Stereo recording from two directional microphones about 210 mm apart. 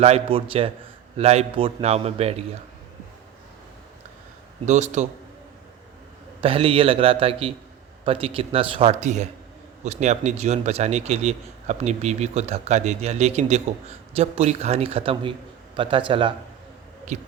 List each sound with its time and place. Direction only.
0.0 s a man's voice: 30° right (ahead or behind)
4.6 s a man's voice: 35° right (ahead or behind)
6.4 s a man's voice: 25° right (ahead or behind)
17.1 s a man's voice: 35° right (ahead or behind)